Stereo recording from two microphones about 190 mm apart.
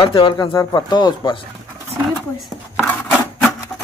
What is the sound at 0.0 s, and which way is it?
Speech, 25° left (ahead or behind).